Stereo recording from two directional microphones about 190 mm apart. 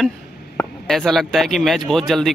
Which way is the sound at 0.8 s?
Centre (ahead or behind).